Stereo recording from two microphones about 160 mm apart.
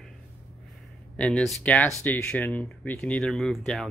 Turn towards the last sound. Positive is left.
turn(degrees=0)  # may be behind; listen again after turning